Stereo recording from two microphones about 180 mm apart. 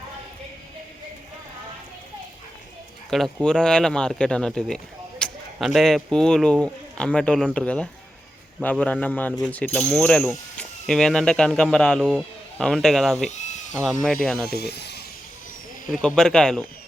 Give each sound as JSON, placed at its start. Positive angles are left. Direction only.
{"t": 3.1, "sound": "a man's voice", "side_deg": 0}
{"t": 13.3, "sound": "a sound", "side_deg": 40}
{"t": 13.8, "sound": "speech", "side_deg": 0}
{"t": 14.5, "sound": "speech", "side_deg": 65}
{"t": 15.9, "sound": "speech", "side_deg": 5}